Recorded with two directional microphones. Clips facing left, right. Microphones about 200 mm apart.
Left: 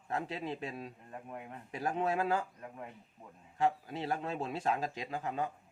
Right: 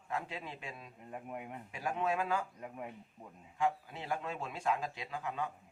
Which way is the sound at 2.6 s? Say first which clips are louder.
Right 2 dB; 15° right (ahead or behind).